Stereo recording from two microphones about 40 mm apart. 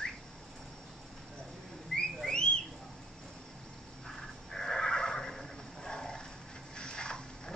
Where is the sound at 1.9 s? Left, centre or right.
Centre.